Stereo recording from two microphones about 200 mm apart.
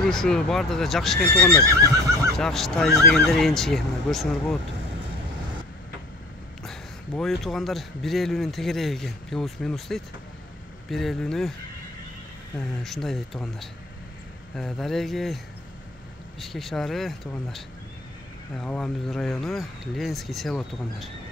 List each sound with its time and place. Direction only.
0.0 s a man's voice: 5° left (ahead or behind)
6.6 s a man's voice: centre (ahead or behind)
12.5 s a man's voice: centre (ahead or behind)